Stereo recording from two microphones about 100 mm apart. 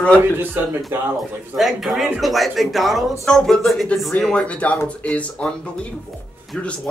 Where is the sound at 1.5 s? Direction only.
Centre (ahead or behind).